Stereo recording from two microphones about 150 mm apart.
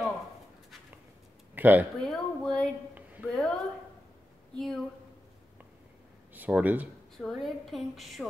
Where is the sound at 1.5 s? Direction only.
10° right (ahead or behind).